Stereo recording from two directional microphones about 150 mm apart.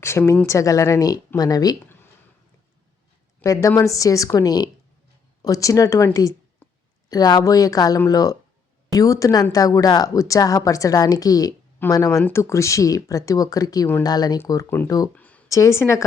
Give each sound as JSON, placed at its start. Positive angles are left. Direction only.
{"t": 0.0, "sound": "a woman's voice", "side_deg": 15}
{"t": 3.4, "sound": "a woman's voice", "side_deg": 20}
{"t": 15.1, "sound": "a sound", "side_deg": 10}
{"t": 15.4, "sound": "a woman's voice", "side_deg": 20}